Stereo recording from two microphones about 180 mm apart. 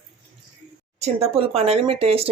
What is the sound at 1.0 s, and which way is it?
Speech, 35° right (ahead or behind).